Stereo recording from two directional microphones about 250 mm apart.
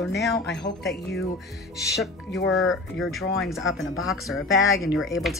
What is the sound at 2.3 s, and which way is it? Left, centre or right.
Speech, left.